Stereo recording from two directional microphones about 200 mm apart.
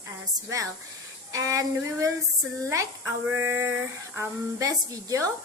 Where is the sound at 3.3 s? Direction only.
15° right (ahead or behind).